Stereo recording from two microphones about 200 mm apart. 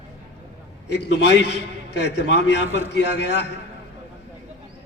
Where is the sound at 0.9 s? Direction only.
55° left (ahead or behind).